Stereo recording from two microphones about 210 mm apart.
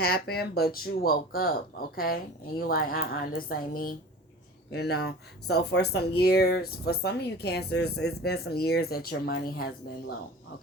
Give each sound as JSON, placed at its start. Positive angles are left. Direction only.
{"t": 0.0, "sound": "speech", "side_deg": 45}
{"t": 2.6, "sound": "speech", "side_deg": 45}